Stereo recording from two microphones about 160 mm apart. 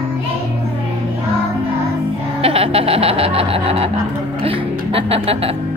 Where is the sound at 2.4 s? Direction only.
35° right (ahead or behind).